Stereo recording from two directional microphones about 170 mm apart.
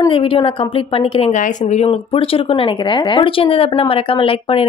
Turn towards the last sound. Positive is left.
turn(degrees=35)  # may be behind; listen again after turning